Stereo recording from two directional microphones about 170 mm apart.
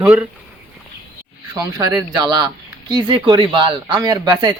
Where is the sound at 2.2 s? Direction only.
25° right (ahead or behind).